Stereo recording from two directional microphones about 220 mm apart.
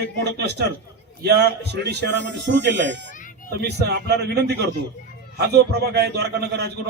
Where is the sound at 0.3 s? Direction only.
50° right (ahead or behind).